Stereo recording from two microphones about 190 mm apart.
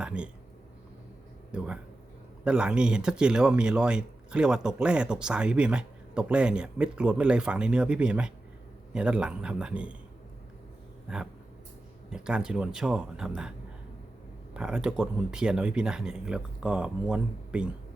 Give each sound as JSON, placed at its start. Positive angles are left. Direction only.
{"t": 0.0, "sound": "speech", "side_deg": -5}
{"t": 1.5, "sound": "speech", "side_deg": -5}
{"t": 11.1, "sound": "speech", "side_deg": -5}
{"t": 14.5, "sound": "speech", "side_deg": -5}